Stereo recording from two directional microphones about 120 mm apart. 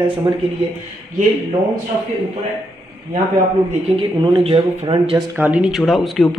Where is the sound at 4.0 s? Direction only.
45° right (ahead or behind).